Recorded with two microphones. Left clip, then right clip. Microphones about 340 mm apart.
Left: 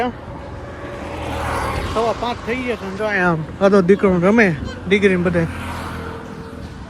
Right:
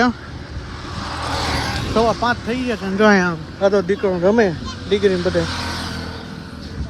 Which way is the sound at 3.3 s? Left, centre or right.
Left.